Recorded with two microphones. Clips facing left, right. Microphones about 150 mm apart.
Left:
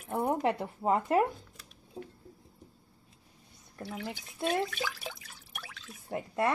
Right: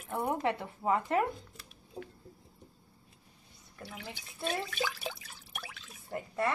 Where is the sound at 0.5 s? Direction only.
40° left (ahead or behind).